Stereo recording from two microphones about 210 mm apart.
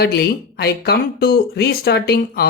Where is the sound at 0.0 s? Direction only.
50° left (ahead or behind).